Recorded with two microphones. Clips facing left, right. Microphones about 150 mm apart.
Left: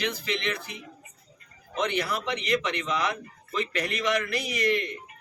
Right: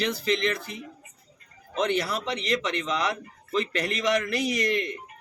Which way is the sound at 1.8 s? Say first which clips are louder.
Right 1 dB; 40° right (ahead or behind).